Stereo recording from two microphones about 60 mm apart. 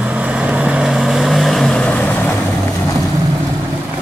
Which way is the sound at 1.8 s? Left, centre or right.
Centre.